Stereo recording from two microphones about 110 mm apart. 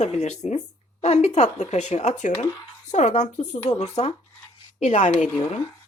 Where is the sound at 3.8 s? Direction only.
60° left (ahead or behind).